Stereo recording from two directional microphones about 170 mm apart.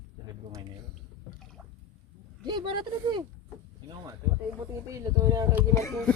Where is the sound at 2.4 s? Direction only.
25° right (ahead or behind).